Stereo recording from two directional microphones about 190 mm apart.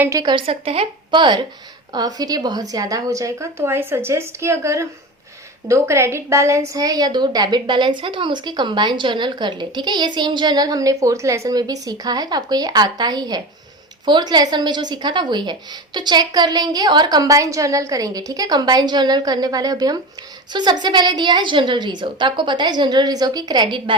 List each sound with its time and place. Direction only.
0.0 s a woman's voice: 15° right (ahead or behind)